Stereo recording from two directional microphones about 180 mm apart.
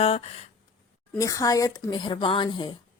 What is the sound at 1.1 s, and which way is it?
A woman's voice, 20° left (ahead or behind).